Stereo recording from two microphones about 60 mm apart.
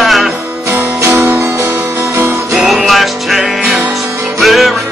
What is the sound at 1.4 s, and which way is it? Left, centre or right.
Music, right.